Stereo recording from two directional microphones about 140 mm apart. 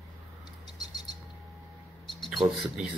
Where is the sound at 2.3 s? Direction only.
Centre (ahead or behind).